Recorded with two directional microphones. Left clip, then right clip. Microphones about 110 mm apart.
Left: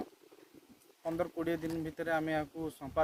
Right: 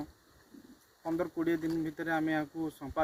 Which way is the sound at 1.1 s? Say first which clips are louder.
Right 3 dB; 50° left (ahead or behind).